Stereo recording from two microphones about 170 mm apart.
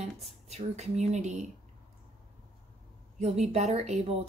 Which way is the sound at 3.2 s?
40° right (ahead or behind).